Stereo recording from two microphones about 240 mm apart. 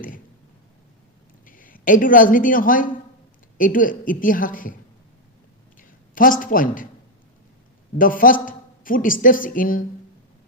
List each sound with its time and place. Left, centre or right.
1.5 s a woman's voice: left
5.8 s a woman's voice: left
7.9 s a woman's voice: left